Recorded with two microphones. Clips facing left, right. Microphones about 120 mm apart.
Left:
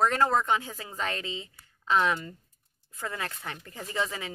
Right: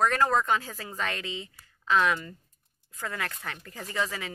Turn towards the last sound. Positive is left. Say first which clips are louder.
# even
turn(degrees=25)  # may be behind; listen again after turning